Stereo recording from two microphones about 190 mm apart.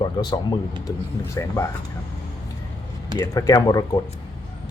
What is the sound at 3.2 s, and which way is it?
Speech, 20° left (ahead or behind).